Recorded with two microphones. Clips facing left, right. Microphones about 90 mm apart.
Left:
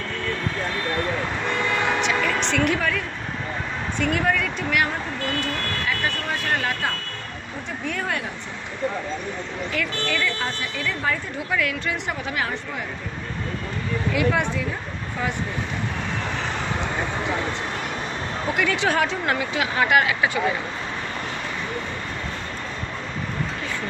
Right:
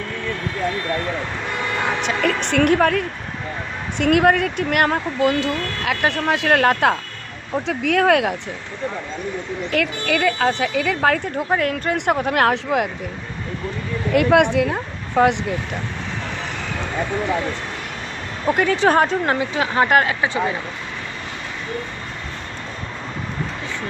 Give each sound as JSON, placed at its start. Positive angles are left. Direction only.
{"t": 2.0, "sound": "speech", "side_deg": -50}
{"t": 4.0, "sound": "speech", "side_deg": -65}
{"t": 7.6, "sound": "speech", "side_deg": -90}
{"t": 9.7, "sound": "speech", "side_deg": -60}
{"t": 11.3, "sound": "speech", "side_deg": -50}
{"t": 14.1, "sound": "speech", "side_deg": -70}
{"t": 18.5, "sound": "speech", "side_deg": -40}